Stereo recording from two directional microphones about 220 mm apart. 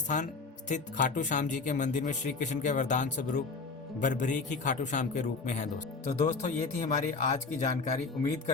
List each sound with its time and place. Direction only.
0.7 s speech: 35° left (ahead or behind)